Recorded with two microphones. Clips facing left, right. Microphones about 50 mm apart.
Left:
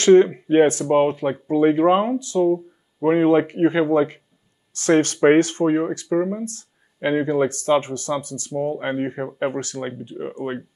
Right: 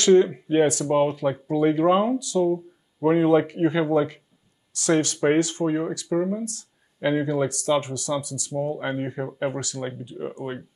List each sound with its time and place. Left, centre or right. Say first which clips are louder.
0.0 s speech: left 4 dB; left
2.4 s speech: left 4 dB; left
6.1 s speech: left 2 dB; left
6.4 s speech: left 2 dB; left
9.6 s speech: left 3 dB; left